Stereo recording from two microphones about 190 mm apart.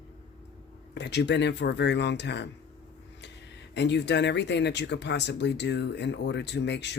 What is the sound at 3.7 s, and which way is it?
Speech, 65° left (ahead or behind).